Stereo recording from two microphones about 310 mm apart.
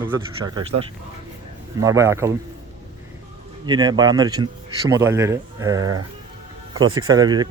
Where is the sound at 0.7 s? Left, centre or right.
Right.